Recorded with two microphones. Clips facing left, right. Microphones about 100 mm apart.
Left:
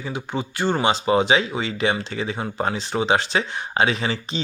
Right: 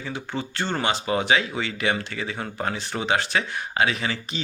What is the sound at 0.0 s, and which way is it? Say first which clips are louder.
Speech: left 3 dB; 15° left (ahead or behind).